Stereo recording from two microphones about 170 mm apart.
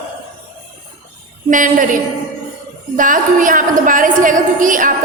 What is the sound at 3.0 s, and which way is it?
A woman's voice, 50° right (ahead or behind).